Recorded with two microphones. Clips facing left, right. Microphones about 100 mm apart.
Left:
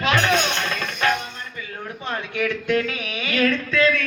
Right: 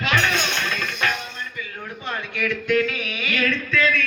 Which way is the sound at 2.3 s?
30° left (ahead or behind).